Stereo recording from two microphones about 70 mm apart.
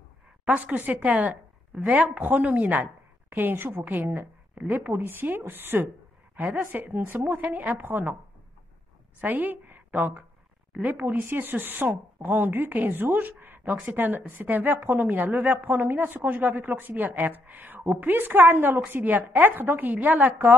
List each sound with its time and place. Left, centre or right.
0.5 s speech: right
9.2 s speech: right